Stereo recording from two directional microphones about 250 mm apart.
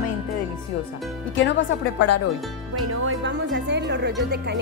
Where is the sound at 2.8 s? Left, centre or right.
Right.